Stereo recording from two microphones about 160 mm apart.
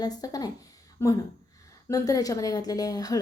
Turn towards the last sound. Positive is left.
turn(degrees=25)  # may be behind; listen again after turning